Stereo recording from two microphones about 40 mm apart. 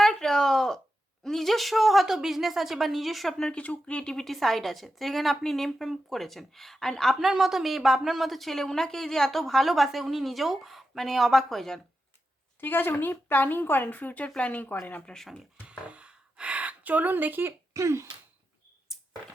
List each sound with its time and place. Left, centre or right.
0.0 s a sound: centre
1.2 s speech: centre
3.3 s speech: left
4.3 s speech: centre
7.2 s speech: centre
12.5 s speech: left
14.3 s speech: left
14.7 s speech: left
15.1 s speech: left
15.9 s a sound: right
18.9 s a sound: centre